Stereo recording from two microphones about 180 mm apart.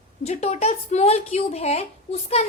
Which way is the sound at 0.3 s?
40° left (ahead or behind).